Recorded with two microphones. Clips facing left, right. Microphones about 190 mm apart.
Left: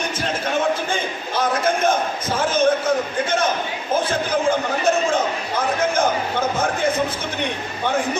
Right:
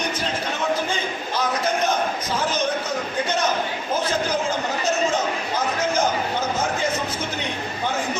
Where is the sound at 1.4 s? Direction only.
50° left (ahead or behind).